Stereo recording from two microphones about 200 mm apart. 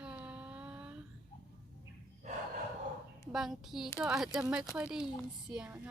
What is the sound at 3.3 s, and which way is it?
A child's voice, centre (ahead or behind).